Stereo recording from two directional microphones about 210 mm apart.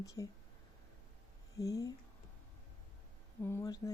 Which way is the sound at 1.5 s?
15° left (ahead or behind).